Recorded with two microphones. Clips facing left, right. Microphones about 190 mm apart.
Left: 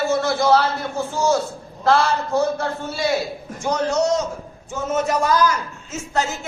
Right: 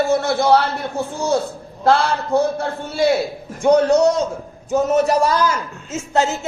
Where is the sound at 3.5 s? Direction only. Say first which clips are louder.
Right 8 dB; 60° right (ahead or behind).